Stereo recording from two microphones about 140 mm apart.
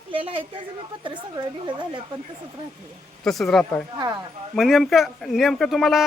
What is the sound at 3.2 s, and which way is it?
Speech, centre (ahead or behind).